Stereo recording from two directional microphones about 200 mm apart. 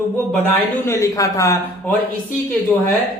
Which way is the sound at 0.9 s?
15° left (ahead or behind).